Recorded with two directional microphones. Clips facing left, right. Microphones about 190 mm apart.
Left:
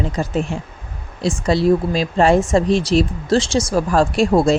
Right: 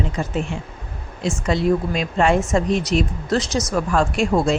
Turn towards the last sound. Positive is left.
turn(degrees=35)  # may be behind; listen again after turning